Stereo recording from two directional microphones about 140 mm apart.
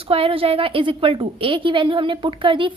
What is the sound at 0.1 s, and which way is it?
A woman's voice, 40° right (ahead or behind).